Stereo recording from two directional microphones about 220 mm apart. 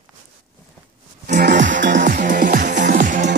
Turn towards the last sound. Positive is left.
turn(degrees=-35)  # may be behind; listen again after turning